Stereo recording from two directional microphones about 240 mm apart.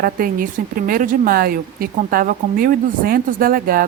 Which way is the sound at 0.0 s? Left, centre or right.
Right.